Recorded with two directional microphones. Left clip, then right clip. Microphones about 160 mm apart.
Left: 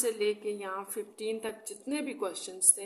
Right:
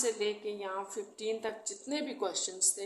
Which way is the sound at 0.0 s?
25° left (ahead or behind).